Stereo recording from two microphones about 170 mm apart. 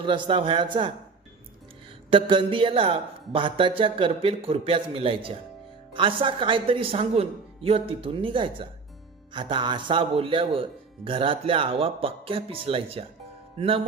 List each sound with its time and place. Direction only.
0.0 s a man's voice: 30° right (ahead or behind)
2.0 s speech: 30° right (ahead or behind)